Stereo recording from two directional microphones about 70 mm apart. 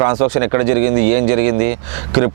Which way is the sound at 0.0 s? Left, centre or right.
Centre.